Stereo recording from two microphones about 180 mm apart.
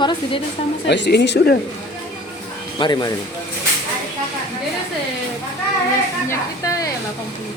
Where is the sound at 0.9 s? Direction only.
70° left (ahead or behind).